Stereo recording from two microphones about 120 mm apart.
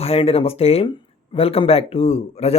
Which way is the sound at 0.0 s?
55° left (ahead or behind).